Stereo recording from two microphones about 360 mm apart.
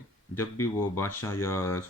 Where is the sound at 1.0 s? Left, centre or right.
Centre.